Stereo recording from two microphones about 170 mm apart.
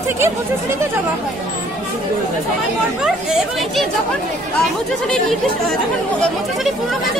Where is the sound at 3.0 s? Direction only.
5° right (ahead or behind).